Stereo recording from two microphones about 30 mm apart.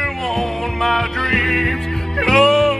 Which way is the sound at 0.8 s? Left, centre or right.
Centre.